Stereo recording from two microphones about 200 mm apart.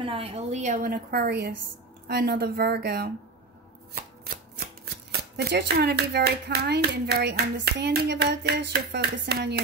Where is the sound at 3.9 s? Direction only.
45° right (ahead or behind).